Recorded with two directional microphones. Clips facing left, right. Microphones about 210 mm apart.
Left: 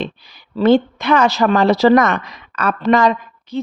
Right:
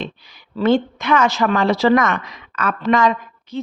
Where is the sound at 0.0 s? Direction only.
35° left (ahead or behind).